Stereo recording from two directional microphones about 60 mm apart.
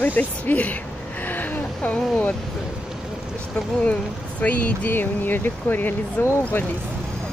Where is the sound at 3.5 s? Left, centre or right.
Left.